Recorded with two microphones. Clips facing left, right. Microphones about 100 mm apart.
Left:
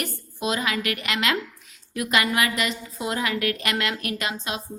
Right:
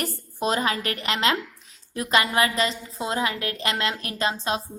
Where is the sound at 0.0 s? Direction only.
35° right (ahead or behind).